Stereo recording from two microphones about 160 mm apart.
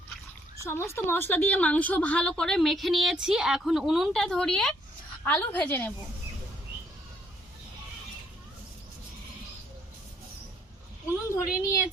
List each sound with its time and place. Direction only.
0.6 s a woman's voice: 15° left (ahead or behind)
11.3 s a woman's voice: 20° left (ahead or behind)